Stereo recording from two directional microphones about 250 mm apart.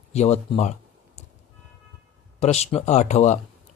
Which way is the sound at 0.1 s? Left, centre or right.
Left.